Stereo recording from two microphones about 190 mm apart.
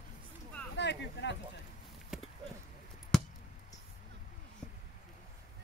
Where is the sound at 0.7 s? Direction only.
65° left (ahead or behind).